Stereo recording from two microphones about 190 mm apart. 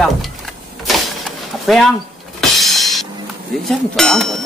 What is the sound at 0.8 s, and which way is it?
Vehicle, centre (ahead or behind).